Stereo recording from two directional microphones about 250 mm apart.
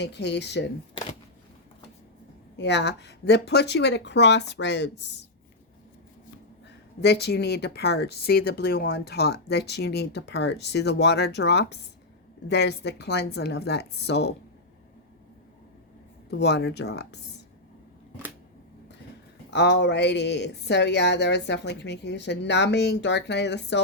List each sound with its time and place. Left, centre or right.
0.0 s speech: left
2.6 s speech: left
7.0 s speech: left
16.3 s speech: left
19.5 s speech: left